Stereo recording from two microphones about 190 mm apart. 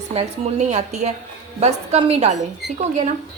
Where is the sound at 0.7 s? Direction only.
35° right (ahead or behind).